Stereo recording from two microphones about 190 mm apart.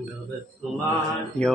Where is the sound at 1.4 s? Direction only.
35° right (ahead or behind).